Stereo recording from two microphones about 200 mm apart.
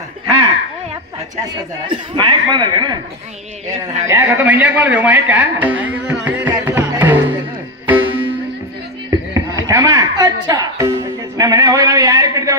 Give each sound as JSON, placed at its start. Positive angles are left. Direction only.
{"t": 1.3, "sound": "speech", "side_deg": -20}
{"t": 4.1, "sound": "a man's voice", "side_deg": -10}
{"t": 6.5, "sound": "music", "side_deg": -10}